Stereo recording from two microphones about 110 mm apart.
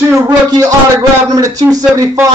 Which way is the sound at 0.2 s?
30° right (ahead or behind).